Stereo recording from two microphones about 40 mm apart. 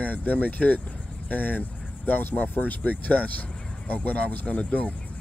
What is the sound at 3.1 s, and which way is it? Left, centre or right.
Speech, left.